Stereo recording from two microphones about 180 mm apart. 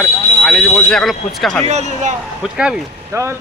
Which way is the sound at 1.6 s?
40° right (ahead or behind).